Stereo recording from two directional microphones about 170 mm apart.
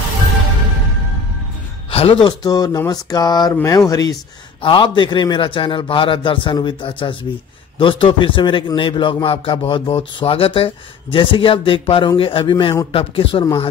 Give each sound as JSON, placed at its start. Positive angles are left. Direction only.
{"t": 1.9, "sound": "a man's voice", "side_deg": 30}